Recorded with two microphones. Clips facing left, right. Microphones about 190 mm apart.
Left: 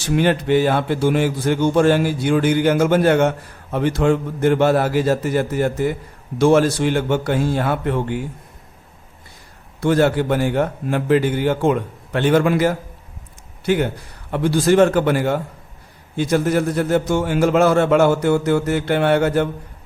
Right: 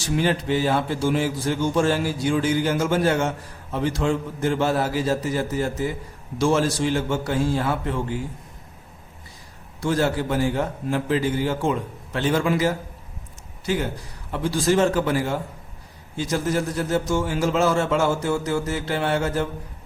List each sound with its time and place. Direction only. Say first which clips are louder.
0.0 s a man's voice: left 5 dB; 60° left (ahead or behind)
9.8 s a man's voice: left 6 dB; 65° left (ahead or behind)